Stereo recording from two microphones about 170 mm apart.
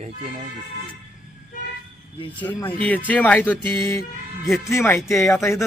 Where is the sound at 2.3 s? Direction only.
10° left (ahead or behind).